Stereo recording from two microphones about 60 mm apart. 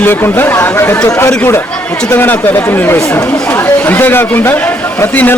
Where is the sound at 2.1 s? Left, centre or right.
Left.